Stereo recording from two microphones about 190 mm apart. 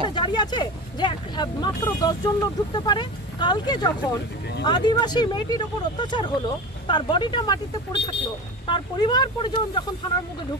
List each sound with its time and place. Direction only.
0.1 s speech: 25° left (ahead or behind)